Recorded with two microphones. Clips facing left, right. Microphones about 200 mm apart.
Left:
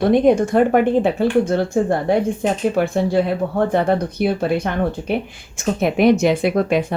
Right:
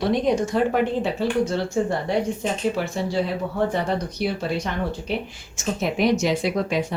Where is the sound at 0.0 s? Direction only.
55° left (ahead or behind).